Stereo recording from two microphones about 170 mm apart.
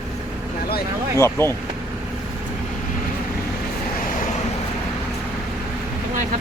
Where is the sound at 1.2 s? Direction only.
15° left (ahead or behind).